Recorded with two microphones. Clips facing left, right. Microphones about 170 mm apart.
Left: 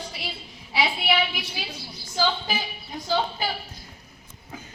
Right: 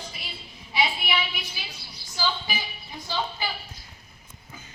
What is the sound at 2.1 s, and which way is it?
Speech, 55° left (ahead or behind).